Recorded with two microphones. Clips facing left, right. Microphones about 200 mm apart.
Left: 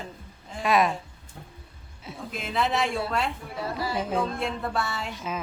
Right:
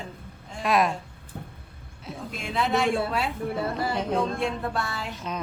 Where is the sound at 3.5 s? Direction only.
55° right (ahead or behind).